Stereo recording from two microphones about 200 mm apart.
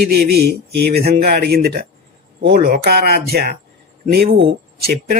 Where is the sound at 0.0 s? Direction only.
50° right (ahead or behind).